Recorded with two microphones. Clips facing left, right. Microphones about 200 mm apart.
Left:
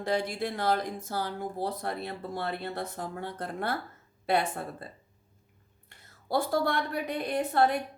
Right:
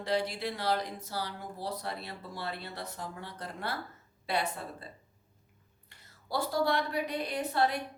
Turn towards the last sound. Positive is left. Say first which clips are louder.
# left 4 dB
turn(degrees=50)  # may be behind; listen again after turning